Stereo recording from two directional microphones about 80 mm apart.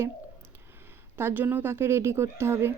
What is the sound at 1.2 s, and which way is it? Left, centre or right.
Speech, right.